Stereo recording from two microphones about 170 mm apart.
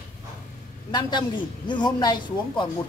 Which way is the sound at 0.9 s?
25° left (ahead or behind).